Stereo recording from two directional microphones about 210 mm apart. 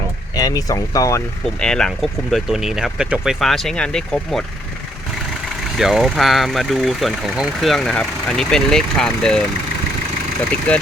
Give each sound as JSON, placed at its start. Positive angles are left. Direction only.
{"t": 0.3, "sound": "speech", "side_deg": 15}
{"t": 1.5, "sound": "speech", "side_deg": 5}
{"t": 5.7, "sound": "speech", "side_deg": 0}
{"t": 10.7, "sound": "speech", "side_deg": 5}